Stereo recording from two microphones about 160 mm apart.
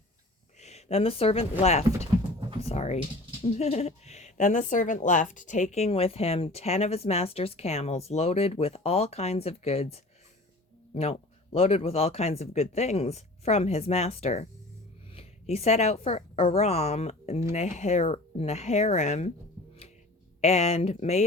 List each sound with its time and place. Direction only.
0.6 s a woman's voice: 40° left (ahead or behind)
20.4 s speech: 40° left (ahead or behind)